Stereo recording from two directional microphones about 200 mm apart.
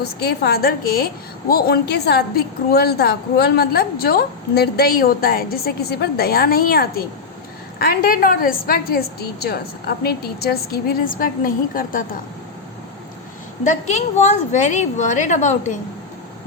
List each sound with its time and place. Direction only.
0.0 s a woman's voice: 55° left (ahead or behind)
13.7 s a woman's voice: 35° left (ahead or behind)